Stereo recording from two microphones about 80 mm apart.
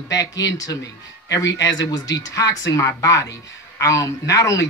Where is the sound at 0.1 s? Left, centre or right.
Left.